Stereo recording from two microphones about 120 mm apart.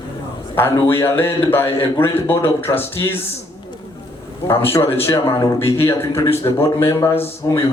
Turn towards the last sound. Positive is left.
turn(degrees=20)  # may be behind; listen again after turning